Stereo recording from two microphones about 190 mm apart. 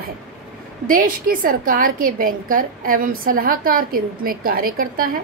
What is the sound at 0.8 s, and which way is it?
A woman's voice, 45° right (ahead or behind).